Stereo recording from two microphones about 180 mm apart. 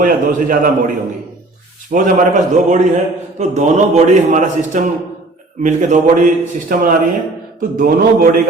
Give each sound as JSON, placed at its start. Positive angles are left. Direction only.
{"t": 0.0, "sound": "a man's voice", "side_deg": -45}
{"t": 1.9, "sound": "a man's voice", "side_deg": -45}